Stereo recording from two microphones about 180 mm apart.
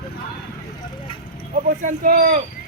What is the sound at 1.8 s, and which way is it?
Speech, 50° right (ahead or behind).